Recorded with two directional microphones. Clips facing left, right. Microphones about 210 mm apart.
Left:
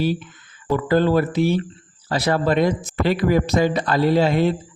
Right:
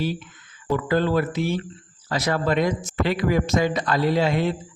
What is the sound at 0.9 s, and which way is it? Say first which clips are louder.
Speech: left 5 dB; 35° left (ahead or behind).